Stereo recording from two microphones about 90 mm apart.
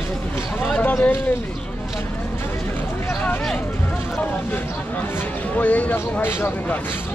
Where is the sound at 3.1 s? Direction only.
10° left (ahead or behind).